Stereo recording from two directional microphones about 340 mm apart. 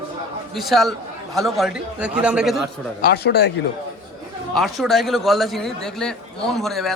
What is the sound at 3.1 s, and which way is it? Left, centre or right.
Speech, left.